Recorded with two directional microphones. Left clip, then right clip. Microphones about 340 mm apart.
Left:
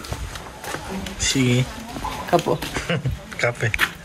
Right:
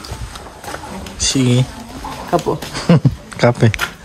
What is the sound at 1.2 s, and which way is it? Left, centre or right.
A woman's voice, centre.